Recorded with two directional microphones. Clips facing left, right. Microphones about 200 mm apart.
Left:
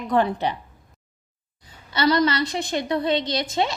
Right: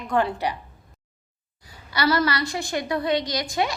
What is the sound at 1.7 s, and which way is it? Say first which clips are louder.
A woman's voice: left 2 dB; 25° left (ahead or behind).